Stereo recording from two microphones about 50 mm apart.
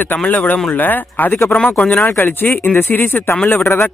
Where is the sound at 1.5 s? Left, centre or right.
Left.